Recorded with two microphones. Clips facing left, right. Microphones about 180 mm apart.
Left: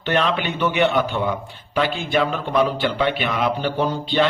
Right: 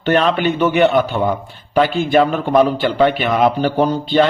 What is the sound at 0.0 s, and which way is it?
A man's voice, 40° right (ahead or behind).